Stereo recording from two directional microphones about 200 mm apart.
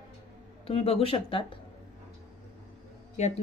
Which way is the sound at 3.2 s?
35° left (ahead or behind).